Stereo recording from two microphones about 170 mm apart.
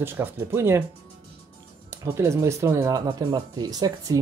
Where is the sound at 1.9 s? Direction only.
15° right (ahead or behind).